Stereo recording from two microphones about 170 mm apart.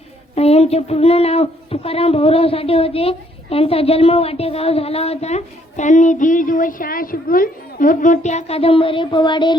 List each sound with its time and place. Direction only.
0.3 s speech: 35° left (ahead or behind)